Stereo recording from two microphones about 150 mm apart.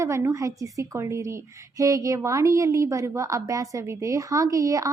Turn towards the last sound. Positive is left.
turn(degrees=-20)  # may be behind; listen again after turning